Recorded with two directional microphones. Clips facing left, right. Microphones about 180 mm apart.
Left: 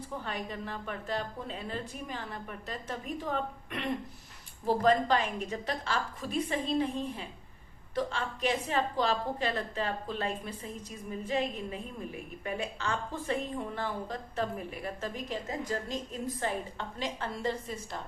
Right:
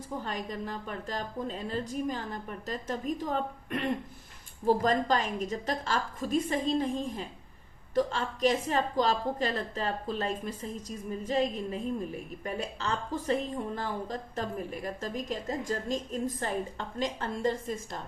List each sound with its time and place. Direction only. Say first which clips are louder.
0.3 s a woman's voice: right 1 dB; 40° right (ahead or behind)